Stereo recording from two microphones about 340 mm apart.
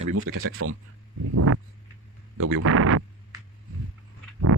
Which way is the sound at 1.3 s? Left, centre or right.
Right.